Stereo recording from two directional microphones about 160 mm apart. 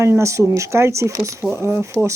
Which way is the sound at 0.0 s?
20° right (ahead or behind).